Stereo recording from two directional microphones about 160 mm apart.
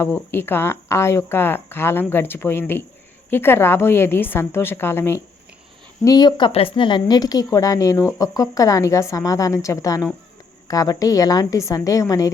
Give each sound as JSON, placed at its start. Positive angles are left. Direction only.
{"t": 0.0, "sound": "speech", "side_deg": 15}
{"t": 6.1, "sound": "speech", "side_deg": 25}